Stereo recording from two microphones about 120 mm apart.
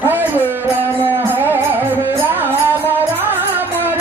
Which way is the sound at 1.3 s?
15° right (ahead or behind).